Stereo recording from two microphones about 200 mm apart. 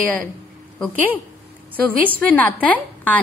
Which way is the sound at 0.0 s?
5° left (ahead or behind).